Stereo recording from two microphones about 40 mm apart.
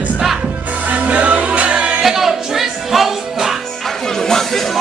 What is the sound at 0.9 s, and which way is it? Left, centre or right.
Music, right.